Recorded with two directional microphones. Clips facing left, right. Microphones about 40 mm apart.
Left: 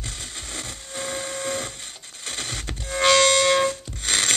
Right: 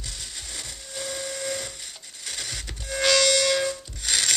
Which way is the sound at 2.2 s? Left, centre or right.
Left.